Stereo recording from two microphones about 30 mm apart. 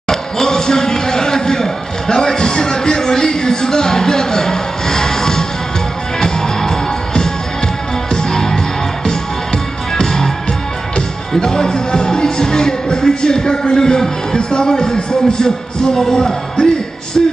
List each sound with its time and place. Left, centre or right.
0.1 s basketball bounce: left
6.1 s music: left
9.9 s music: centre
11.3 s music: left
14.3 s speech: left